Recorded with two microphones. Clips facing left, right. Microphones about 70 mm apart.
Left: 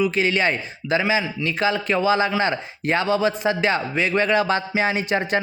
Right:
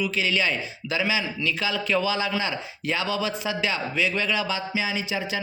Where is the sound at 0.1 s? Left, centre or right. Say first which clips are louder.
Left 4 dB; left.